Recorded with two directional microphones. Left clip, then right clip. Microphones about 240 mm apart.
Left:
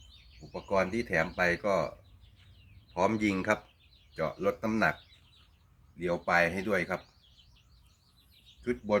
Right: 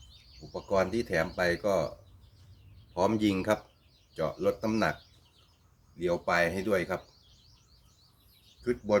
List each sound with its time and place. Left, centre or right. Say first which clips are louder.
0.3 s speech: right 1 dB; centre
2.9 s speech: right 1 dB; centre
6.0 s speech: even; centre
8.6 s speech: right 2 dB; centre